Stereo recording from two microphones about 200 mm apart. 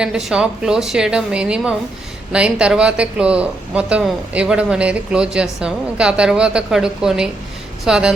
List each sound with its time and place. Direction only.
0.0 s speech: 5° right (ahead or behind)